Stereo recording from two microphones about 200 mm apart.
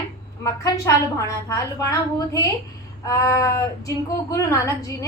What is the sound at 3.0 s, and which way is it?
Speech, 15° left (ahead or behind).